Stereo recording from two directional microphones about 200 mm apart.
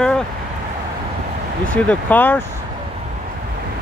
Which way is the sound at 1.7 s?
10° left (ahead or behind).